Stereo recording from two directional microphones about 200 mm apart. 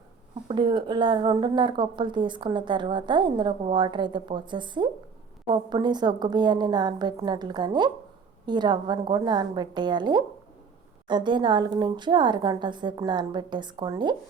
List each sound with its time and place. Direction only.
0.4 s speech: 25° right (ahead or behind)